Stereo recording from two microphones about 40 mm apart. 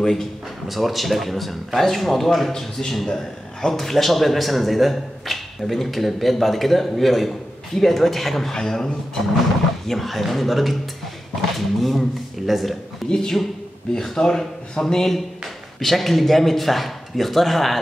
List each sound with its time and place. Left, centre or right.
0.0 s speech: centre
0.7 s a man's voice: centre
13.1 s a man's voice: centre